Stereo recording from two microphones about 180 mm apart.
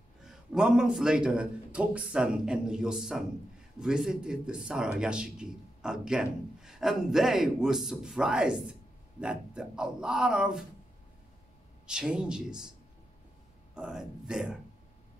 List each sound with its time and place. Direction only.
0.2 s speech: 5° right (ahead or behind)
11.8 s speech: 5° right (ahead or behind)
13.7 s speech: 5° right (ahead or behind)